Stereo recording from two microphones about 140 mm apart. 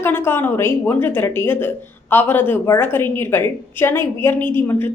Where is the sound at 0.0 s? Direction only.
15° left (ahead or behind).